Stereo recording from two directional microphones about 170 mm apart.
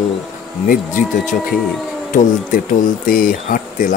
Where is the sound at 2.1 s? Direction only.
50° left (ahead or behind).